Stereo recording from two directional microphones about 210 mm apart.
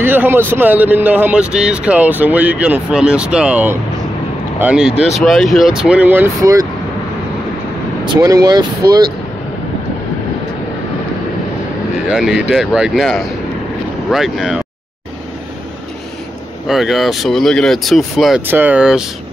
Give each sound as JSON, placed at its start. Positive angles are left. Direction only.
{"t": 0.0, "sound": "speech", "side_deg": -10}
{"t": 8.1, "sound": "speech", "side_deg": -15}
{"t": 11.9, "sound": "speech", "side_deg": -5}
{"t": 16.6, "sound": "speech", "side_deg": 0}